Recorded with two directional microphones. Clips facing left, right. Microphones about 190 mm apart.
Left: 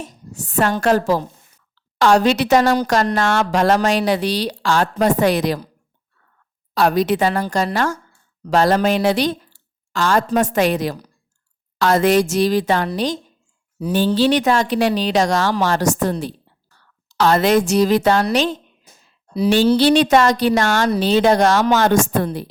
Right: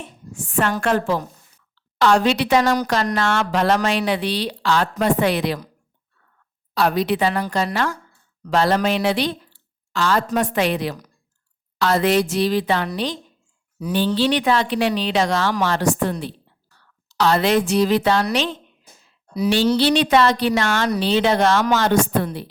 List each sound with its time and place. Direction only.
0.0 s a sound: 40° left (ahead or behind)
0.8 s a woman's voice: 40° left (ahead or behind)
6.7 s a woman's voice: 45° left (ahead or behind)
14.1 s a woman's voice: 40° left (ahead or behind)
17.2 s a woman's voice: 45° left (ahead or behind)
19.7 s a woman's voice: 45° left (ahead or behind)